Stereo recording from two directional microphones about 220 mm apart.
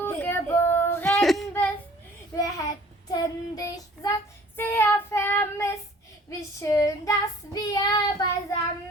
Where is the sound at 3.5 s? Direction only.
15° left (ahead or behind).